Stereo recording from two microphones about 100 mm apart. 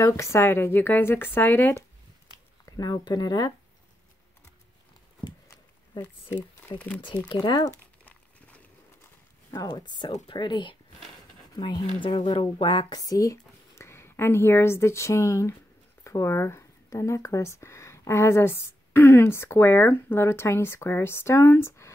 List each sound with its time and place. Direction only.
0.0 s speech: 30° left (ahead or behind)
2.6 s speech: 40° left (ahead or behind)
5.5 s a sound: 20° left (ahead or behind)
7.2 s speech: 50° left (ahead or behind)
8.0 s a sound: 15° left (ahead or behind)
9.5 s speech: 40° left (ahead or behind)
13.1 s speech: 35° left (ahead or behind)